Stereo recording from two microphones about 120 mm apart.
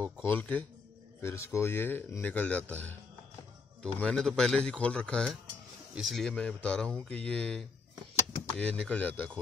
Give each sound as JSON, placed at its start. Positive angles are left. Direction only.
{"t": 0.0, "sound": "speech", "side_deg": 15}